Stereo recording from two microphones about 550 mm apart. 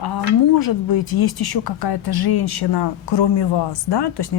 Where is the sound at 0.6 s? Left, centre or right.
Left.